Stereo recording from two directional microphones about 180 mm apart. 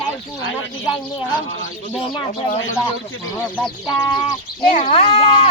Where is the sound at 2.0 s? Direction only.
30° left (ahead or behind).